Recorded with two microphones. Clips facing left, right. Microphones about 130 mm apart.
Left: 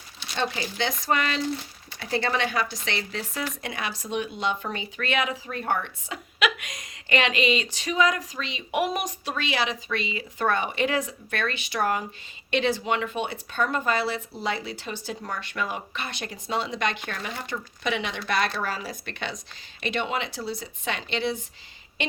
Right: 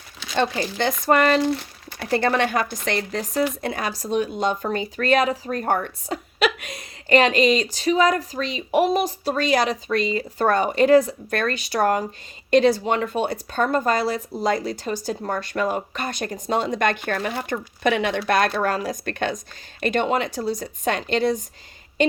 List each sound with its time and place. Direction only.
0.3 s speech: 50° right (ahead or behind)